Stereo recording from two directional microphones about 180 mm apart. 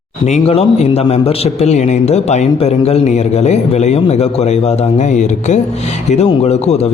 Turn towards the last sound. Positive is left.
turn(degrees=35)  # may be behind; listen again after turning